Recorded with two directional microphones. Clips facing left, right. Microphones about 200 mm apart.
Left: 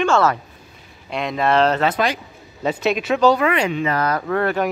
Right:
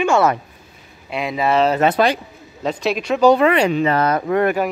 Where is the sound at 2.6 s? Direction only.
5° left (ahead or behind).